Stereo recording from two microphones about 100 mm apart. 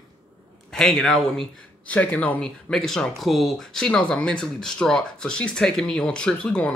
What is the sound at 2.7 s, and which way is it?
Speech, 5° left (ahead or behind).